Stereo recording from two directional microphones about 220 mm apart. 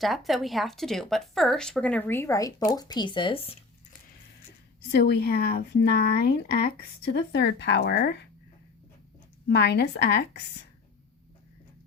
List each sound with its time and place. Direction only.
0.0 s speech: centre (ahead or behind); by 3.6 s 25° left (ahead or behind)
4.9 s speech: 50° left (ahead or behind)
9.5 s speech: 50° left (ahead or behind)